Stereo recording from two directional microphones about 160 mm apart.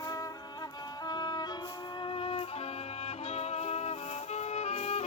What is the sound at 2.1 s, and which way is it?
Music, 35° left (ahead or behind).